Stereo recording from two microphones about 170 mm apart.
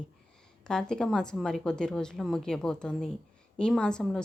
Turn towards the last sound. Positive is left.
turn(degrees=5)  # may be behind; listen again after turning